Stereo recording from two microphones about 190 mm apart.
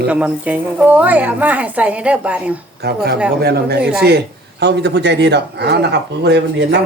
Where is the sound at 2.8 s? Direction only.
55° right (ahead or behind).